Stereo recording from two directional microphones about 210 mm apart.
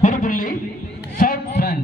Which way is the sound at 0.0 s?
40° left (ahead or behind).